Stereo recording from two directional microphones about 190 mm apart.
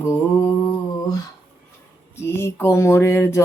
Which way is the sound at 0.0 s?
15° left (ahead or behind).